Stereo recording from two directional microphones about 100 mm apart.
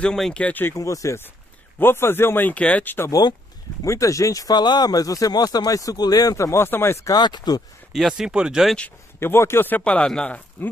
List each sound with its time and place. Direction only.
0.0 s speech: 5° left (ahead or behind)
0.7 s speech: 35° left (ahead or behind)
3.1 s speech: 40° left (ahead or behind); by 7.0 s 25° left (ahead or behind)
7.1 s speech: 45° left (ahead or behind)
7.9 s speech: 5° right (ahead or behind)
9.2 s speech: 25° left (ahead or behind)